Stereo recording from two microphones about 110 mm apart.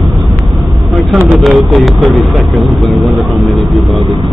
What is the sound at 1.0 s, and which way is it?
Vehicle, centre (ahead or behind).